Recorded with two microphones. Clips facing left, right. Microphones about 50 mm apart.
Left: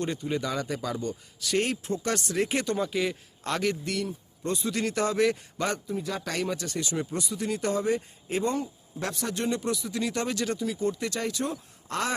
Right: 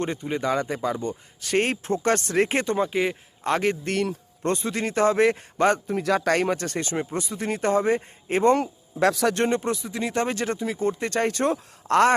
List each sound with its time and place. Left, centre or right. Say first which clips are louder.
0.0 s speech: right 3 dB; right
1.4 s speech: right 4 dB; right
3.9 s speech: right 6 dB; right
4.7 s speech: right 6 dB; right
5.9 s speech: right 9 dB; right
6.3 s speech: right 7 dB; right
9.4 s speech: right 5 dB; right
11.9 s a sound: right 12 dB; right